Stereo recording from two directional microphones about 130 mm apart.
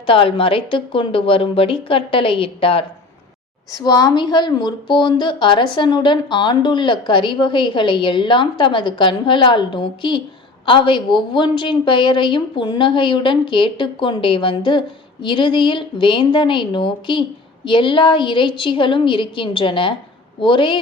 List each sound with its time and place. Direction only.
0.0 s a woman's voice: 45° left (ahead or behind)
3.7 s a woman's voice: 30° left (ahead or behind)